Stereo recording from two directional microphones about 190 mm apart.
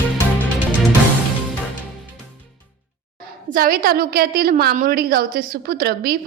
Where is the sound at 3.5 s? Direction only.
50° right (ahead or behind).